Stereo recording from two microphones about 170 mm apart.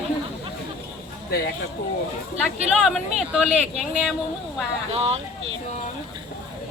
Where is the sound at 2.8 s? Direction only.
Centre (ahead or behind).